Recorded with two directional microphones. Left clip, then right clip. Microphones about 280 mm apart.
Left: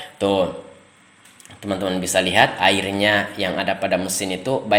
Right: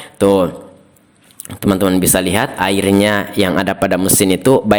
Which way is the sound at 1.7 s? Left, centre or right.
Right.